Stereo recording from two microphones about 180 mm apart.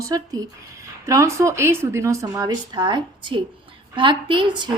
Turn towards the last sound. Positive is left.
turn(degrees=-25)  # may be behind; listen again after turning